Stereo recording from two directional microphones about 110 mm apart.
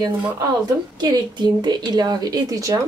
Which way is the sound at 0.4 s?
35° right (ahead or behind).